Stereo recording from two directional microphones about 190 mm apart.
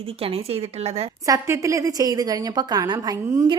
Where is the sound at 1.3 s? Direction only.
15° right (ahead or behind).